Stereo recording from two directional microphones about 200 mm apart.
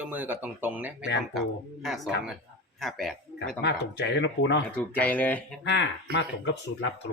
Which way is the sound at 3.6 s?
60° left (ahead or behind).